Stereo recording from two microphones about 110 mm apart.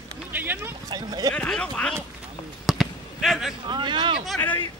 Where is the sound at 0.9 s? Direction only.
40° right (ahead or behind).